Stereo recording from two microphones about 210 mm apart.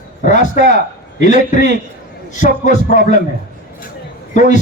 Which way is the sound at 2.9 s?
35° left (ahead or behind).